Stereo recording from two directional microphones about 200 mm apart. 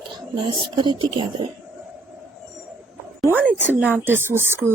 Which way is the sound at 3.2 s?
10° right (ahead or behind).